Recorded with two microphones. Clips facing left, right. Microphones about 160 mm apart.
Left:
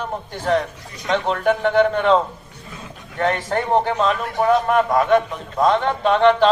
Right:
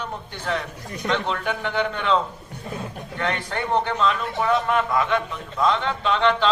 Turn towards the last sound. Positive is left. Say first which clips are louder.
# left 6 dB
turn(degrees=45)  # may be behind; listen again after turning